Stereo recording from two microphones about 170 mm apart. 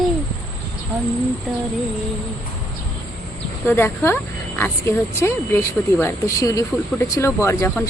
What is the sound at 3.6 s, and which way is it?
A woman's voice, 15° left (ahead or behind).